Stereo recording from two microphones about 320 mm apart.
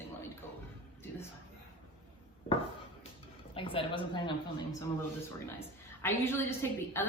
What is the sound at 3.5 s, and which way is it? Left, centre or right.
A woman's voice, centre.